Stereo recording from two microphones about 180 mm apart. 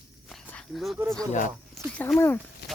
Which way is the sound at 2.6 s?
65° left (ahead or behind).